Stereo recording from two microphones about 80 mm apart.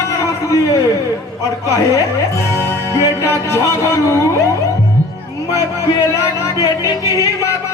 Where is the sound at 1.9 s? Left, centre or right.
Left.